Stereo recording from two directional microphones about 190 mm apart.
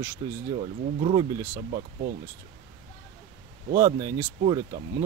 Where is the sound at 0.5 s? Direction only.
30° right (ahead or behind).